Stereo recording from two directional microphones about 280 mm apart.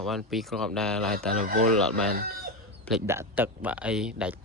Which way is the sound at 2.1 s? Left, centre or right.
Right.